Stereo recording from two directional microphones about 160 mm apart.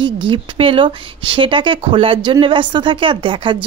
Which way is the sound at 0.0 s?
35° right (ahead or behind).